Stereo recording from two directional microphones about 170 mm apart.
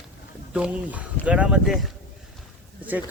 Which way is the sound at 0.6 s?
5° right (ahead or behind).